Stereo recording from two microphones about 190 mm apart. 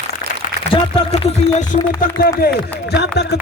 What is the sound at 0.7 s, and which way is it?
Speech, 30° left (ahead or behind).